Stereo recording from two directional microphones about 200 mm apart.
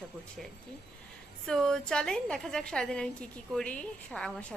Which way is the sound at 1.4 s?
5° left (ahead or behind).